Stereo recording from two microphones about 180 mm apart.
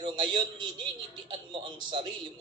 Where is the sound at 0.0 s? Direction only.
25° right (ahead or behind).